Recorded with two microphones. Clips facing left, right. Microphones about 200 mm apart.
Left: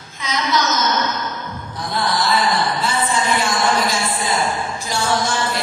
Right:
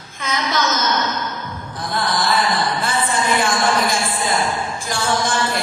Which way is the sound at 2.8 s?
50° right (ahead or behind).